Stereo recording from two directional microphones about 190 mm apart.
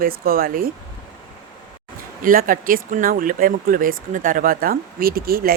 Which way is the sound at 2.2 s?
45° right (ahead or behind).